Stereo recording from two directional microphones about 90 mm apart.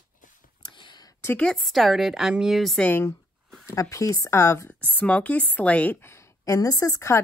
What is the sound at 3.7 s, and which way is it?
Speech, 40° left (ahead or behind).